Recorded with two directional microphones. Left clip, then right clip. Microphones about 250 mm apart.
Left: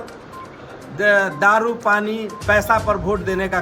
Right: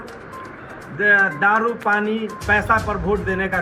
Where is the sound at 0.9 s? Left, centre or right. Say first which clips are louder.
Even; centre.